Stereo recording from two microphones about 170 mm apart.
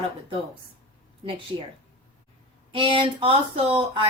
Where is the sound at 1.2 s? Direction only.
30° right (ahead or behind).